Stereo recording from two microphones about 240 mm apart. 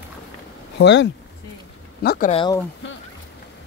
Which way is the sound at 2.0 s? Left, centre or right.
Left.